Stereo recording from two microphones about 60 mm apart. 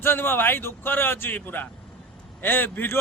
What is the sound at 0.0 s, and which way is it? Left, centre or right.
Speech, left.